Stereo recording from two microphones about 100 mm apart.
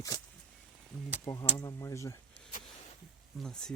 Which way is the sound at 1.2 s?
30° left (ahead or behind).